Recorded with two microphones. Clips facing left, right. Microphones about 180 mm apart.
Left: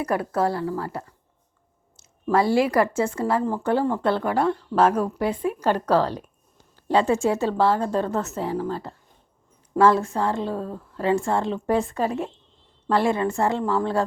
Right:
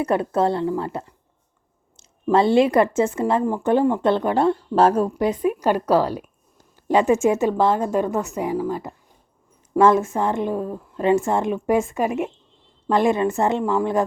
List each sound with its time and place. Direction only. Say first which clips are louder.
0.0 s a woman's voice: right 3 dB; 25° right (ahead or behind)
5.4 s a woman's voice: right 3 dB; 10° right (ahead or behind)